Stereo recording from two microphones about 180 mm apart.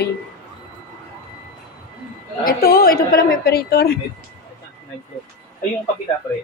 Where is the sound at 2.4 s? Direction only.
55° left (ahead or behind).